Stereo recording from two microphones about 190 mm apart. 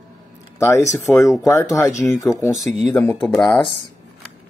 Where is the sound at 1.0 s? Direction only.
15° left (ahead or behind).